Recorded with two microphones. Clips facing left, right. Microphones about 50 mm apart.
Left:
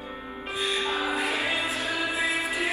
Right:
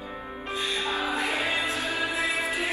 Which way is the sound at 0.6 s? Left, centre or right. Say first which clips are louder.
Left 1 dB; left.